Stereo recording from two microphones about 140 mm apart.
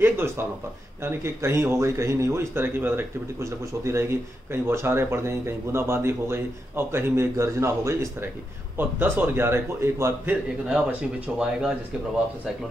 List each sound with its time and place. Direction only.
0.0 s a sound: 15° right (ahead or behind)
1.0 s speech: 20° right (ahead or behind)
10.7 s speech: 10° right (ahead or behind)